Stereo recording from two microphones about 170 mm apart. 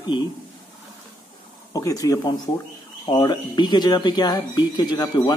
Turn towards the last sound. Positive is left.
turn(degrees=25)  # may be behind; listen again after turning